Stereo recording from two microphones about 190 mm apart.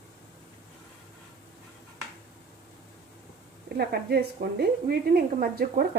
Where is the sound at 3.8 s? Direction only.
55° right (ahead or behind).